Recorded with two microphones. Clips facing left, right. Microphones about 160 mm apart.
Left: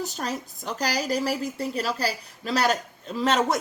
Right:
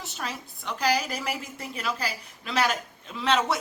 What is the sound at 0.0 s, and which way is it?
A woman's voice, 40° left (ahead or behind).